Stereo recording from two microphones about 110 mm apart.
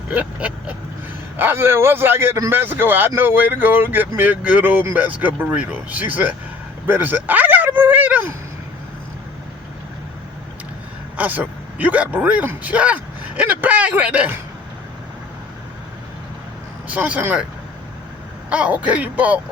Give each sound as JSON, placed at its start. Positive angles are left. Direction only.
{"t": 0.1, "sound": "a man's voice", "side_deg": -10}
{"t": 6.8, "sound": "a sound", "side_deg": -20}
{"t": 11.2, "sound": "speech", "side_deg": -15}
{"t": 16.9, "sound": "speech", "side_deg": -15}
{"t": 18.5, "sound": "speech", "side_deg": -10}